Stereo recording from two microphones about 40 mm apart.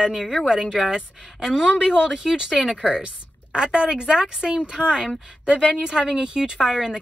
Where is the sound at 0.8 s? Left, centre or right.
Centre.